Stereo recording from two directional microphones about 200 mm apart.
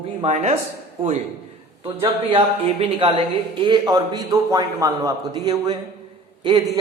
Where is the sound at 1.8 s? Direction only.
25° right (ahead or behind).